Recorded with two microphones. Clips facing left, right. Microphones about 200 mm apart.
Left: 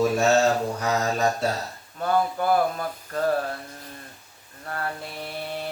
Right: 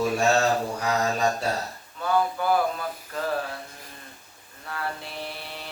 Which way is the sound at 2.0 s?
45° left (ahead or behind).